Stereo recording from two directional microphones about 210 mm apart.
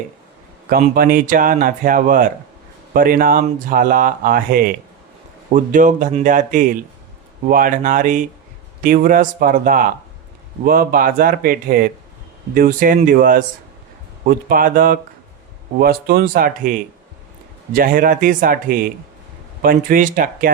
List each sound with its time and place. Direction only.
0.7 s speech: 45° right (ahead or behind)
17.7 s speech: 40° right (ahead or behind)